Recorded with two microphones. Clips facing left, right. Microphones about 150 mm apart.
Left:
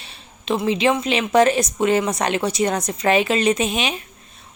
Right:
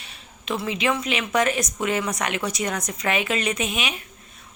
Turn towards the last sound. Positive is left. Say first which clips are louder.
# left 7 dB
turn(degrees=30)  # may be behind; listen again after turning